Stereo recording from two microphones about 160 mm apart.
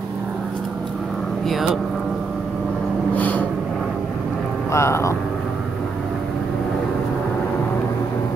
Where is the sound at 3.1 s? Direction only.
10° left (ahead or behind).